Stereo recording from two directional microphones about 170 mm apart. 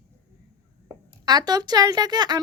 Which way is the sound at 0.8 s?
25° right (ahead or behind).